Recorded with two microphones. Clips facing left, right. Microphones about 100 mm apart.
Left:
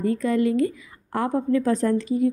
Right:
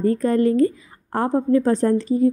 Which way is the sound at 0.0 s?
40° right (ahead or behind).